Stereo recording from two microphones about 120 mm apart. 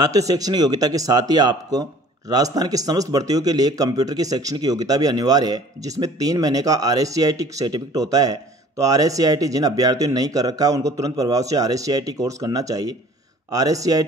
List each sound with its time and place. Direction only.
0.0 s speech: 30° right (ahead or behind)